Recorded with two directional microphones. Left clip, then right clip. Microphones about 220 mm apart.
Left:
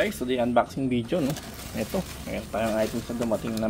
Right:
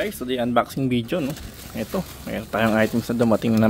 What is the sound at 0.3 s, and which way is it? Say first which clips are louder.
Speech: right 4 dB; 20° right (ahead or behind).